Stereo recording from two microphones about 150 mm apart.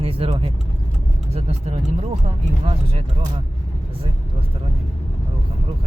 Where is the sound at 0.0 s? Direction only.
40° right (ahead or behind).